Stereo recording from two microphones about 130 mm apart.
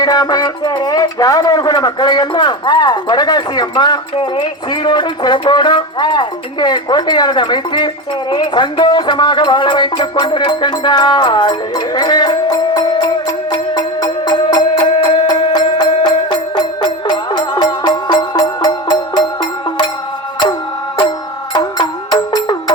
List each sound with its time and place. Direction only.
0.0 s speech: 30° left (ahead or behind)
8.3 s music: 35° left (ahead or behind)
21.5 s music: 30° left (ahead or behind)